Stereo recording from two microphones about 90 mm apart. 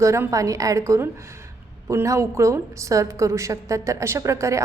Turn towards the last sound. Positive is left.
turn(degrees=-35)  # may be behind; listen again after turning